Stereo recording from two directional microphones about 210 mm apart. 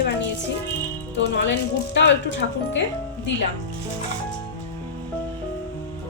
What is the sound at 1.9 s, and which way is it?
Speech, 55° left (ahead or behind).